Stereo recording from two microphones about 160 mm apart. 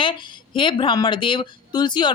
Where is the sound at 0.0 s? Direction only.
30° left (ahead or behind).